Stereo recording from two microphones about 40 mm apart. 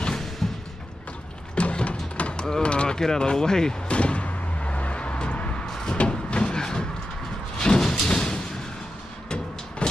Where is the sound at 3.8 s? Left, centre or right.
Left.